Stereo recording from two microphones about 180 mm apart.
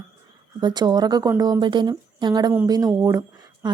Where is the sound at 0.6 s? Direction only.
25° right (ahead or behind).